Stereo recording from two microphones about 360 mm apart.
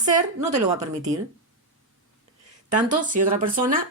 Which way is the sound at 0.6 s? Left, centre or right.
Centre.